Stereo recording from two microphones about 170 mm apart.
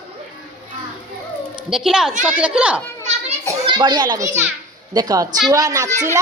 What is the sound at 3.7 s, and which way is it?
A man's voice, 25° right (ahead or behind).